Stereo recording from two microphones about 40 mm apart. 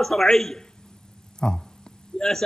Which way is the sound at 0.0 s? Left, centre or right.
Centre.